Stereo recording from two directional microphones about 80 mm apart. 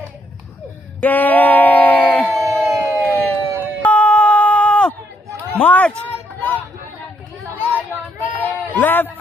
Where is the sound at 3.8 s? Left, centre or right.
Centre.